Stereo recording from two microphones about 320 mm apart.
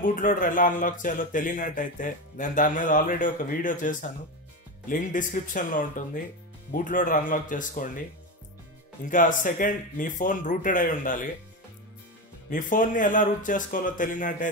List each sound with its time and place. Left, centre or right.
0.0 s speech: left
9.0 s speech: left
12.4 s speech: left